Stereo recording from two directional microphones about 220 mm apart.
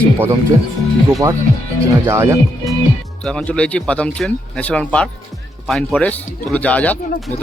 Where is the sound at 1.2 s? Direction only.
15° right (ahead or behind).